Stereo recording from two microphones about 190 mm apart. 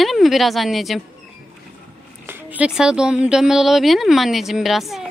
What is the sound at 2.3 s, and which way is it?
A woman's voice, 5° right (ahead or behind).